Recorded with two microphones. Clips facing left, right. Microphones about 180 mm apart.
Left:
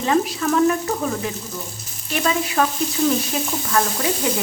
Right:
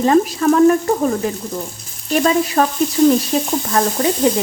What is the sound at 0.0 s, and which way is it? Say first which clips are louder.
Frying: right 6 dB; 40° right (ahead or behind).